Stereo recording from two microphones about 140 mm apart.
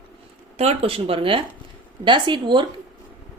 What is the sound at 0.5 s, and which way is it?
A woman's voice, 45° right (ahead or behind).